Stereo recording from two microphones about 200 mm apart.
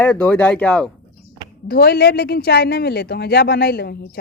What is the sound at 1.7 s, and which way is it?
Speech, 50° left (ahead or behind).